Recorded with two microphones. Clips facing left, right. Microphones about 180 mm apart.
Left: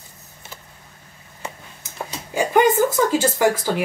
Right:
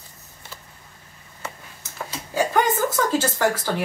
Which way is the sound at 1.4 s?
15° left (ahead or behind).